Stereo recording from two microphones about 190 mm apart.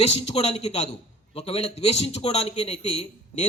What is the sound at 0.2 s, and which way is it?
A man's voice, 35° left (ahead or behind).